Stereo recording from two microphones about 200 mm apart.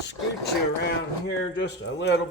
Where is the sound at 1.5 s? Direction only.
60° left (ahead or behind).